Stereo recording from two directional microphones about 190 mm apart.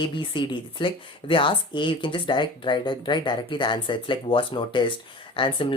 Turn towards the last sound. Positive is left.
turn(degrees=25)  # may be behind; listen again after turning